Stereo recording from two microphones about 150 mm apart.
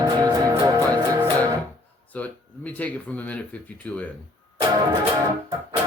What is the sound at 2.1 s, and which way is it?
Speech, 10° left (ahead or behind).